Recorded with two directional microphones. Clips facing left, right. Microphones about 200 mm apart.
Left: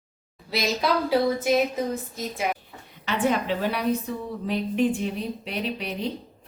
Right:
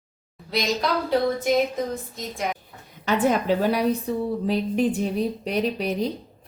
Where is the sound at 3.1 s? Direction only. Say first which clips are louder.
Right 3 dB; 45° right (ahead or behind).